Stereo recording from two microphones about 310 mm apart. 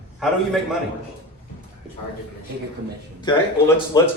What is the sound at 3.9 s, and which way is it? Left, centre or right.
Speech, centre.